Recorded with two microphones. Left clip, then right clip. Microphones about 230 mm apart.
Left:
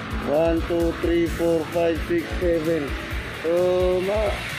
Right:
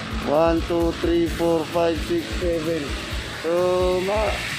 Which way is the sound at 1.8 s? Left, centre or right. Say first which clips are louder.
Right 1 dB; centre.